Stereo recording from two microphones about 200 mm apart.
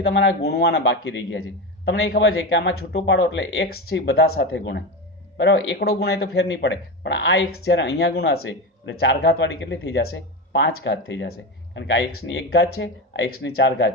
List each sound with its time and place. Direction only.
0.0 s speech: 65° left (ahead or behind)
8.4 s speech: 80° left; by 13.9 s 60° left (ahead or behind)